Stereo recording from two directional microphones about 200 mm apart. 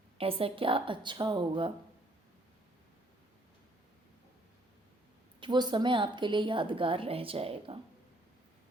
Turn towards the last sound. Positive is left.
turn(degrees=-30)  # may be behind; listen again after turning